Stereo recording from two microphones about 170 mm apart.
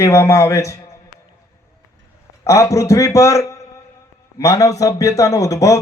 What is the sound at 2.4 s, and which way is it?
Speech, 20° left (ahead or behind).